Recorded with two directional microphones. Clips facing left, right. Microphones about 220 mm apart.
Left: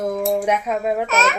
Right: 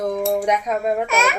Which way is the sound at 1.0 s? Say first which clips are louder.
Even; 10° right (ahead or behind).